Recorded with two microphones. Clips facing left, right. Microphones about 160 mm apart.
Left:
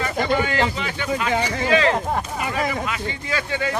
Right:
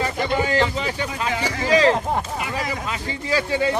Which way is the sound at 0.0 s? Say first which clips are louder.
Left 1 dB; 35° right (ahead or behind).